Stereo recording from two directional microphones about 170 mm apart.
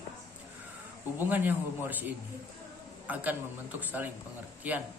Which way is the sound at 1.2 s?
10° right (ahead or behind).